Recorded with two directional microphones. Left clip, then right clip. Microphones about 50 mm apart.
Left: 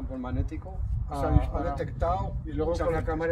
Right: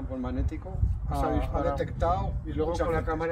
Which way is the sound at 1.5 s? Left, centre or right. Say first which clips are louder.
Right 3 dB; left.